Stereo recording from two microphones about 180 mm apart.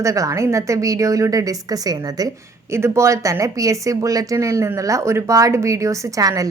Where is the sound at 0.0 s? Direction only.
20° right (ahead or behind).